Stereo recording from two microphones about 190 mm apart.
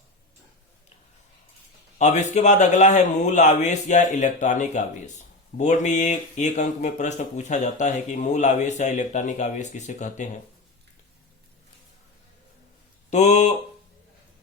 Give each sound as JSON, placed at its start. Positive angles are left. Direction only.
{"t": 2.0, "sound": "speech", "side_deg": 40}
{"t": 13.1, "sound": "speech", "side_deg": 40}